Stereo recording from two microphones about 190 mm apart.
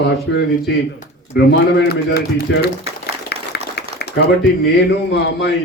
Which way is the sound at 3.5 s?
60° left (ahead or behind).